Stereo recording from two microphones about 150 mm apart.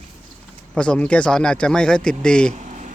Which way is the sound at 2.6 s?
55° right (ahead or behind).